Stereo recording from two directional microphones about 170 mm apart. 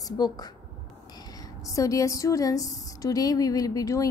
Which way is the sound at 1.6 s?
20° left (ahead or behind).